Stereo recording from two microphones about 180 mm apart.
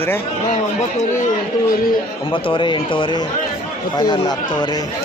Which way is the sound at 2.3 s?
30° left (ahead or behind).